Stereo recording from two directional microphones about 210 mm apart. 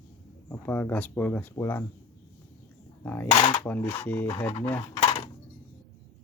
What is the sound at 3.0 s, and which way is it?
Speech, 10° left (ahead or behind).